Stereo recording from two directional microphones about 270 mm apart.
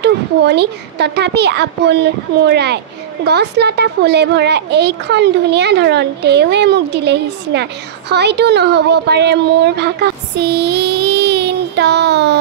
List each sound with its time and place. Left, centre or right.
0.0 s a child's voice: right